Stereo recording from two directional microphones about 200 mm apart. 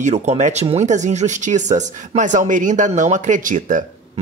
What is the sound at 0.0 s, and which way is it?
Speech, 35° right (ahead or behind).